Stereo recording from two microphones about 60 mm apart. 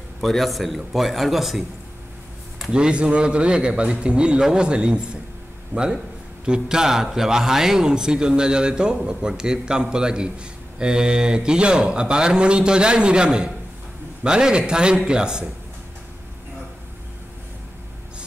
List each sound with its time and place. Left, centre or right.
0.2 s a man's voice: centre
2.7 s a man's voice: centre
5.7 s speech: right
6.4 s a man's voice: centre